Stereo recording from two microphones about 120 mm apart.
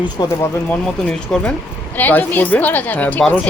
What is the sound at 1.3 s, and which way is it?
Speech, 5° left (ahead or behind).